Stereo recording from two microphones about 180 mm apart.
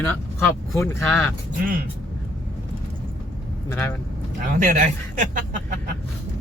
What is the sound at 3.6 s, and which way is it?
Speech, 10° left (ahead or behind).